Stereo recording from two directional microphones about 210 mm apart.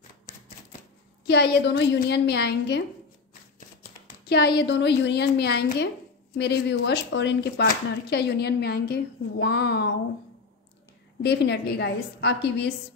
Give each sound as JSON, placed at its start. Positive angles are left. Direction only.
{"t": 1.2, "sound": "speech", "side_deg": 55}
{"t": 4.3, "sound": "speech", "side_deg": 50}
{"t": 11.2, "sound": "speech", "side_deg": 55}